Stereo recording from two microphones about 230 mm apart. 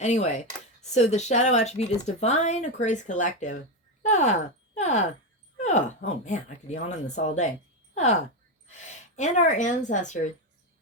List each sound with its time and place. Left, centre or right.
0.0 s speech: left
5.5 s a sound: left
6.1 s speech: left